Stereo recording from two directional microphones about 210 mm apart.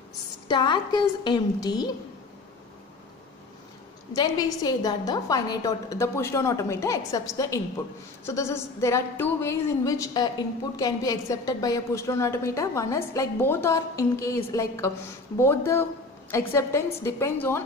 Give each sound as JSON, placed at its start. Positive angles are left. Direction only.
{"t": 0.5, "sound": "a woman's voice", "side_deg": 20}
{"t": 4.1, "sound": "a woman's voice", "side_deg": 20}